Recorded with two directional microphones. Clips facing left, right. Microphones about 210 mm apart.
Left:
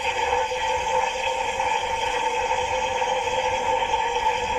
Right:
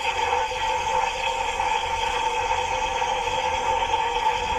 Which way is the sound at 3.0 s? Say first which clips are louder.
Left 3 dB; 10° left (ahead or behind).